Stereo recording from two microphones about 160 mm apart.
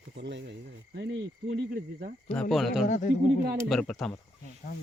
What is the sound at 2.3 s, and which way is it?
Speech, 5° left (ahead or behind).